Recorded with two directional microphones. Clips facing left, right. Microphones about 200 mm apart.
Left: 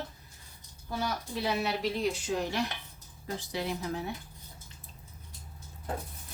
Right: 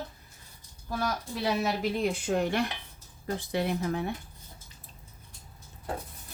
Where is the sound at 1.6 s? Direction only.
55° right (ahead or behind).